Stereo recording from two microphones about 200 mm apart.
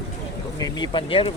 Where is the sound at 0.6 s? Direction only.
20° left (ahead or behind).